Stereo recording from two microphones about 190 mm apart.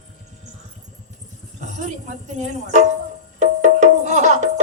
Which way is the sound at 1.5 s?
40° right (ahead or behind).